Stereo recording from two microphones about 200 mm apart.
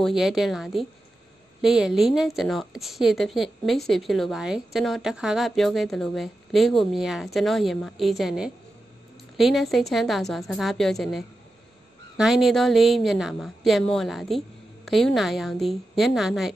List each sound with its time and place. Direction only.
0.0 s a woman's voice: centre (ahead or behind)